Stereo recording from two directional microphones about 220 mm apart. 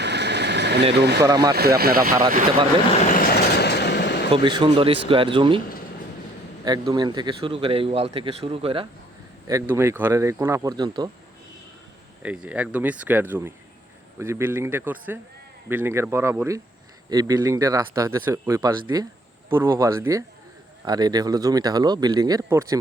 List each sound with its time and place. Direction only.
0.0 s engine: 50° right (ahead or behind)
0.9 s speech: 50° right (ahead or behind)
1.2 s speech: 15° right (ahead or behind)
1.5 s speech: 45° right (ahead or behind)
3.2 s vehicle: 45° left (ahead or behind)
4.3 s speech: 20° right (ahead or behind)
6.7 s speech: 20° right (ahead or behind)
9.5 s speech: 15° right (ahead or behind)
12.2 s speech: 5° right (ahead or behind)